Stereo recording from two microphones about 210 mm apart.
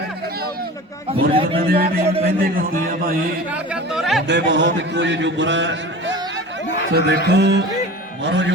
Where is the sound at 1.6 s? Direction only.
45° right (ahead or behind).